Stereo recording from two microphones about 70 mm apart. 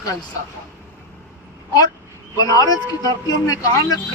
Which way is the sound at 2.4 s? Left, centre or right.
Left.